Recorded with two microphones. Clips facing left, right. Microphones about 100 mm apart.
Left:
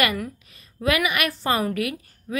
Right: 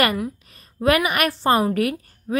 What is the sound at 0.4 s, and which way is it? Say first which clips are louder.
A woman's voice: right 5 dB; 40° right (ahead or behind).